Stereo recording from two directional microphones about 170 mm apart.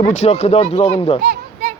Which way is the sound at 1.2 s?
65° right (ahead or behind).